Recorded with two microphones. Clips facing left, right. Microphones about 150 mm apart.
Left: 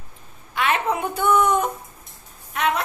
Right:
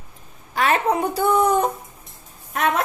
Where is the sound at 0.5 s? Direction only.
40° right (ahead or behind).